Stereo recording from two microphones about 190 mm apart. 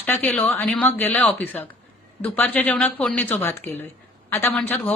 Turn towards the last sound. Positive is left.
turn(degrees=10)  # may be behind; listen again after turning